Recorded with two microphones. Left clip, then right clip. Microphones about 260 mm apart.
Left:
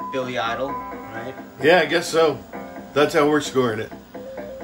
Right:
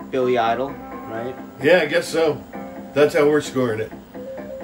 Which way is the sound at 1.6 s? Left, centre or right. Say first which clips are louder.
Even; left.